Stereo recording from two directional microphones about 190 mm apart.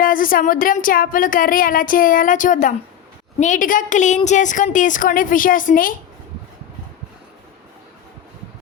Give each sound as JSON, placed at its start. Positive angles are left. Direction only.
{"t": 0.0, "sound": "speech", "side_deg": 45}